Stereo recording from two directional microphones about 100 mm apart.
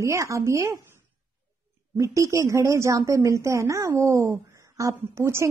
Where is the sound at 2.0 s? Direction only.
30° right (ahead or behind).